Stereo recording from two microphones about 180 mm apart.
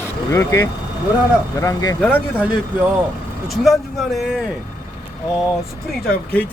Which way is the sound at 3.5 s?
Centre (ahead or behind).